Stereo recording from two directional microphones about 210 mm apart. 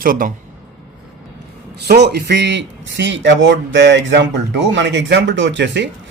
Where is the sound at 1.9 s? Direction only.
50° right (ahead or behind).